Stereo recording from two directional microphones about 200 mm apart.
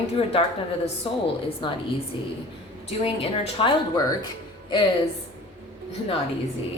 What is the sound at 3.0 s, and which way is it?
Speech, 25° left (ahead or behind).